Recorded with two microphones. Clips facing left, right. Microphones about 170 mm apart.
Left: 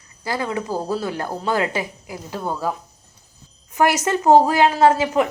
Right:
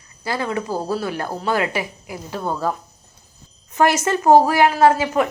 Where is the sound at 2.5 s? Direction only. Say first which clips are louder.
Right 2 dB; 10° left (ahead or behind).